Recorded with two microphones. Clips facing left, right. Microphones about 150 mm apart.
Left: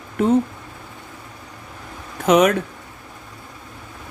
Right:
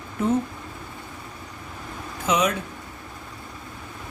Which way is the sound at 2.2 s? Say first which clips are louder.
Left 8 dB; 60° left (ahead or behind).